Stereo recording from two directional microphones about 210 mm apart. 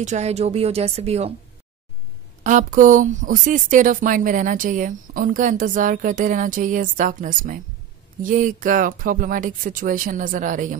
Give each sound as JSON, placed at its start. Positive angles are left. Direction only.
{"t": 0.0, "sound": "speech", "side_deg": -35}
{"t": 2.4, "sound": "speech", "side_deg": -40}